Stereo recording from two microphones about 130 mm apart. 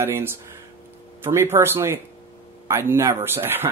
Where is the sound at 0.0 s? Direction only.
15° right (ahead or behind).